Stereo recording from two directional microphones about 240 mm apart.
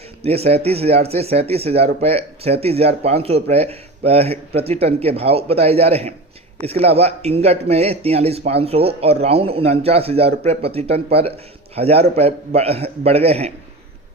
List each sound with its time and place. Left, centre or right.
0.2 s speech: right